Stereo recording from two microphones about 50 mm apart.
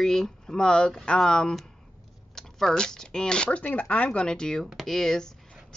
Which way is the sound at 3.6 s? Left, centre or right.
Left.